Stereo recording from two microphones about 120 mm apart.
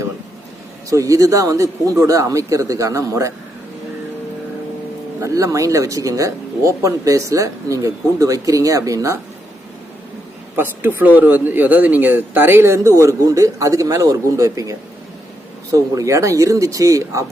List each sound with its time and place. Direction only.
0.9 s speech: 25° right (ahead or behind)
5.2 s speech: 25° right (ahead or behind)
10.6 s speech: 15° right (ahead or behind)